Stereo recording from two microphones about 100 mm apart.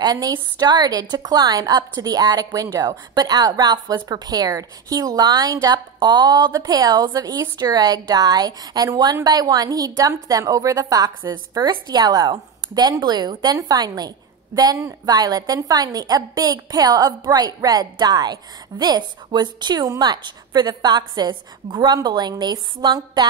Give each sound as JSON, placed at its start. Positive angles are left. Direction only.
{"t": 0.0, "sound": "a woman's voice", "side_deg": -45}